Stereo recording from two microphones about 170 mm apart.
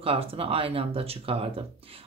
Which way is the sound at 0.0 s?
35° right (ahead or behind).